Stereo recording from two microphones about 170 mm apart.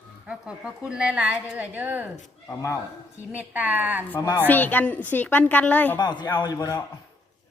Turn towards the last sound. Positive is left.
turn(degrees=20)  # may be behind; listen again after turning